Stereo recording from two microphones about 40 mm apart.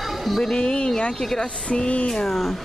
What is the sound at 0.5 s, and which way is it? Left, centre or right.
Speech, left.